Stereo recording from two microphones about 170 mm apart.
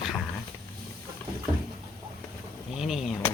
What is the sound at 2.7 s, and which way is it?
Speech, centre (ahead or behind).